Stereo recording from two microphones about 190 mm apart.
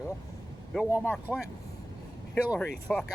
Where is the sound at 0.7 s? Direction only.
10° right (ahead or behind).